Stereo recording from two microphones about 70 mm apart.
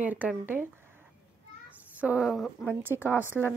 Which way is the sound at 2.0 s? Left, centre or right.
Right.